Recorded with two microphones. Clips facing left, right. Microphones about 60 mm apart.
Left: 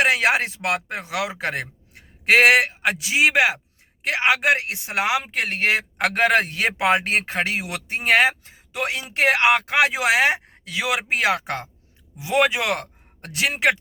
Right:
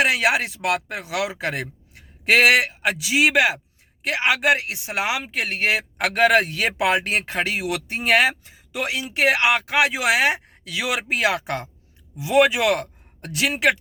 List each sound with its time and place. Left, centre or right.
0.0 s a man's voice: left